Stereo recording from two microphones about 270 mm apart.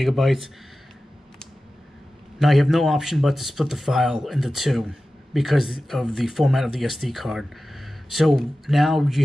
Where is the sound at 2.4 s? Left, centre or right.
Centre.